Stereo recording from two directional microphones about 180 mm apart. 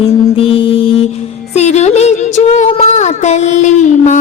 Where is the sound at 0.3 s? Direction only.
30° left (ahead or behind).